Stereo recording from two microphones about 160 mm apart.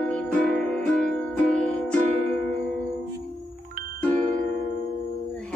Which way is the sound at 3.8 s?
65° right (ahead or behind).